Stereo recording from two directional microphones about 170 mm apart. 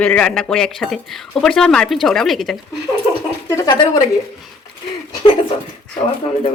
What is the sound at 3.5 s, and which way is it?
Speech, 20° left (ahead or behind).